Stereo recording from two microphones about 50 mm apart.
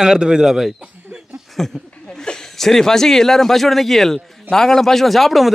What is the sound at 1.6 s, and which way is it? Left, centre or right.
A man's voice, centre.